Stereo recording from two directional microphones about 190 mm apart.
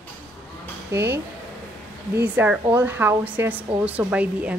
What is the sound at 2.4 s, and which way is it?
A woman's voice, 10° right (ahead or behind).